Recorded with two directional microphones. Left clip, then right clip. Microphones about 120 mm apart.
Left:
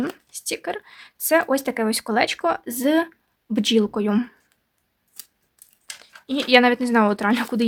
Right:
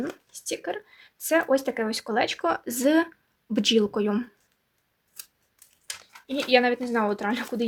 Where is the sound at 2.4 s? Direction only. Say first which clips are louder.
Left 3 dB; 20° left (ahead or behind).